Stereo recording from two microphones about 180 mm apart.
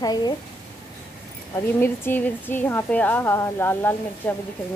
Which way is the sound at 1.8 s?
10° left (ahead or behind).